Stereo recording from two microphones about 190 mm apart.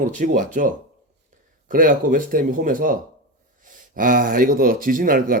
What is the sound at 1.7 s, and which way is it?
Speech, 45° right (ahead or behind).